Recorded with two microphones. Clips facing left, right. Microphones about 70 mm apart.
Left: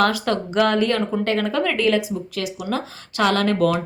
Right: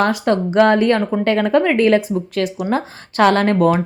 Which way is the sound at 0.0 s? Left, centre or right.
Right.